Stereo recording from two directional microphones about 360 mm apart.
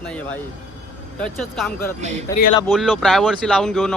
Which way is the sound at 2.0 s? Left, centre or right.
Centre.